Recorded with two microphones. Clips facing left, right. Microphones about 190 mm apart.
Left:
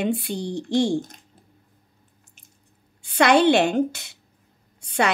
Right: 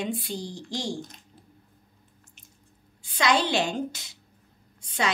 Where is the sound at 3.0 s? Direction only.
60° left (ahead or behind).